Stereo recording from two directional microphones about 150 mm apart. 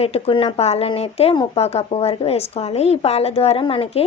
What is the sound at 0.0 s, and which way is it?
A woman's voice, 40° left (ahead or behind).